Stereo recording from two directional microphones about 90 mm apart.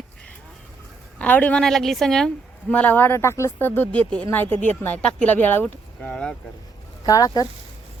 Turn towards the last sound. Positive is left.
turn(degrees=45)  # may be behind; listen again after turning